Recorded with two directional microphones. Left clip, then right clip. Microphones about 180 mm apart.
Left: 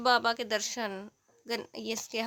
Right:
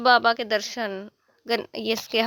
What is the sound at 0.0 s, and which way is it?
A woman's voice, 25° right (ahead or behind).